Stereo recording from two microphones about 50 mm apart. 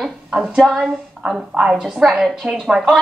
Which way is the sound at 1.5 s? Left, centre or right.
Centre.